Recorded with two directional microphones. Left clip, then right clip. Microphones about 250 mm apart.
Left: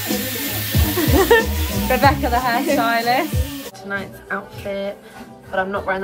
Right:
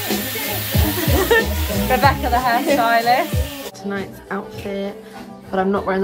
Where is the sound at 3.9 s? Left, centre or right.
Centre.